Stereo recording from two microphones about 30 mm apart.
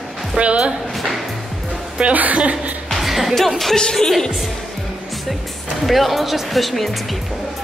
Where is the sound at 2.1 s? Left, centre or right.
Right.